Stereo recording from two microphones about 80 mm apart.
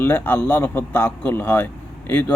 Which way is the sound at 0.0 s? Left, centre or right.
Left.